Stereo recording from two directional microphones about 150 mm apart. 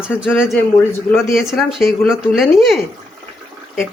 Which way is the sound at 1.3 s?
Centre (ahead or behind).